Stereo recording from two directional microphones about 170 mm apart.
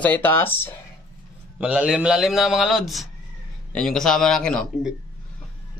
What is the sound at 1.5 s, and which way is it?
Speech, 5° right (ahead or behind).